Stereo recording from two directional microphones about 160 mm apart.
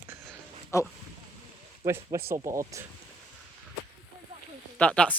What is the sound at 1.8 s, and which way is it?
Speech, 20° right (ahead or behind).